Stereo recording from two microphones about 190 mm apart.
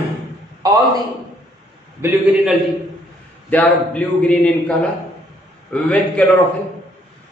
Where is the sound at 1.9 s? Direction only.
10° right (ahead or behind).